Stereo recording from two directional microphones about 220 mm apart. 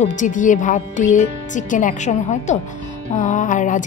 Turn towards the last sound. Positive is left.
turn(degrees=35)  # may be behind; listen again after turning